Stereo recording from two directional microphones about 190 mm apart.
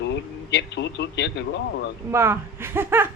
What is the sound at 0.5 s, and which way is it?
Speech, 65° left (ahead or behind).